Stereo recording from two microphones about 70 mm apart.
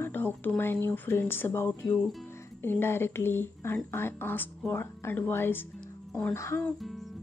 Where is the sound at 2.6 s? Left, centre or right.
Left.